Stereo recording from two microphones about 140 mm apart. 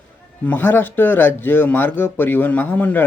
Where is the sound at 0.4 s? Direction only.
15° left (ahead or behind).